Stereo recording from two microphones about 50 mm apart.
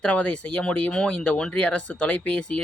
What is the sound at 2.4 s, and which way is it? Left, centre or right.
Speech, centre.